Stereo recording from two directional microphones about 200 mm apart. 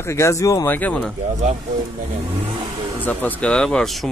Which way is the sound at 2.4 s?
25° right (ahead or behind).